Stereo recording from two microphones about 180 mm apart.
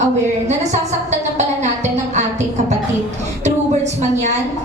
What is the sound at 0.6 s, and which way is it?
A woman's voice, 40° right (ahead or behind).